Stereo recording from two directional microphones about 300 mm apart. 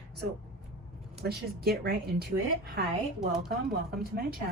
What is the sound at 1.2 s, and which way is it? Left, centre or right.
Speech, right.